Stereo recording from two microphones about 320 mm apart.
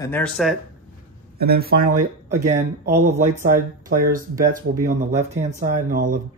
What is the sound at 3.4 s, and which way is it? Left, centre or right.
Speech, right.